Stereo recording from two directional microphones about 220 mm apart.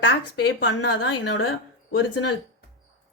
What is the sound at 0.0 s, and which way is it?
A woman's voice, 55° left (ahead or behind).